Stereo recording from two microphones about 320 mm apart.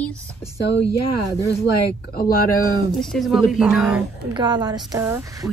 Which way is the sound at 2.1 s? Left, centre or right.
Left.